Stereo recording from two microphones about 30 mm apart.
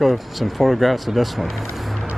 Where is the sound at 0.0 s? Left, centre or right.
Centre.